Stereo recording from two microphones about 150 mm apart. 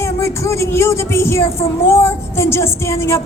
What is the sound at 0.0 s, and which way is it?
A woman's voice, 20° left (ahead or behind).